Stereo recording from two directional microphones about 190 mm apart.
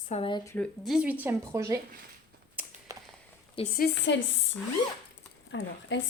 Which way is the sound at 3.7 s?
65° left (ahead or behind).